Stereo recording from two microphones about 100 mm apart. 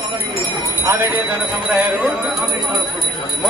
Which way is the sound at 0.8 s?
20° right (ahead or behind).